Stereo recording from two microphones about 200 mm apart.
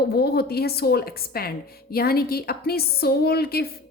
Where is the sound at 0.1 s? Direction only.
50° left (ahead or behind).